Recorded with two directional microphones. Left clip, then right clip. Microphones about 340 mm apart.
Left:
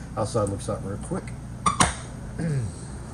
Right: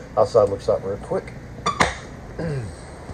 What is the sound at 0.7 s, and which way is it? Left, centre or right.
Speech, right.